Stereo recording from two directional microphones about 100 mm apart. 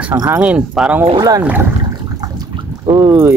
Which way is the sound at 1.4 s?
15° right (ahead or behind).